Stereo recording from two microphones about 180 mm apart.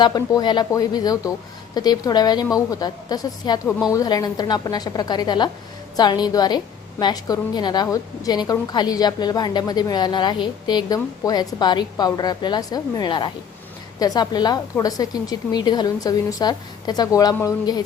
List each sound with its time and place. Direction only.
0.0 s a woman's voice: 25° left (ahead or behind)